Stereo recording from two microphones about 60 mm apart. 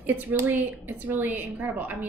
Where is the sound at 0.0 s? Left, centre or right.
Right.